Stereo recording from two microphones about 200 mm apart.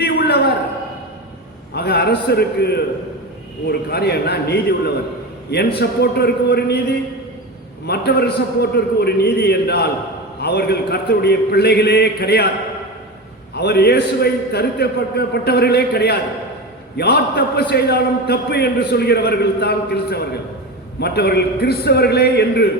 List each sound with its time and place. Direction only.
0.0 s a sound: 55° left (ahead or behind)
1.7 s a man's voice: 55° left (ahead or behind)
7.9 s a man's voice: 55° left (ahead or behind)
13.6 s a man's voice: 55° left (ahead or behind)